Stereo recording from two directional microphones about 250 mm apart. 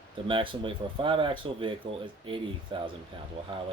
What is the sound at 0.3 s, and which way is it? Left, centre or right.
Speech, centre.